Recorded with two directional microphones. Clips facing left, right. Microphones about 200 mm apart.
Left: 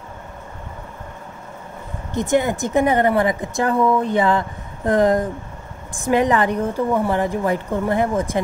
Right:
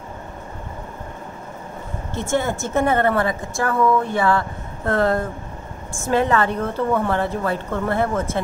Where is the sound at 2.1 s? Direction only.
15° left (ahead or behind).